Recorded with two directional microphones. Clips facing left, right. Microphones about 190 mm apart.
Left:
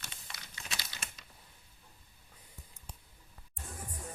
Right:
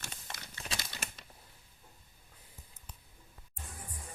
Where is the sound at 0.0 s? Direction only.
50° right (ahead or behind).